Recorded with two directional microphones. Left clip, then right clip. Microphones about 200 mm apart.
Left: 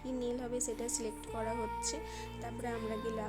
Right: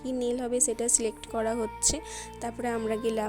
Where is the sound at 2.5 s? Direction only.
40° right (ahead or behind).